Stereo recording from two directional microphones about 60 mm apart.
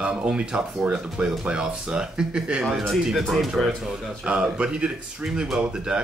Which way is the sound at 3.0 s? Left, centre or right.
Centre.